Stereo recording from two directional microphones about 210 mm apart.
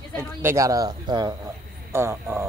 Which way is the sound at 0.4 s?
15° right (ahead or behind).